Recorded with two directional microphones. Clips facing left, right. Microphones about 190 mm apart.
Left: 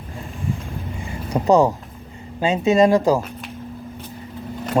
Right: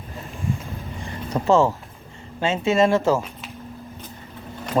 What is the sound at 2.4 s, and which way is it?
Speech, 15° left (ahead or behind).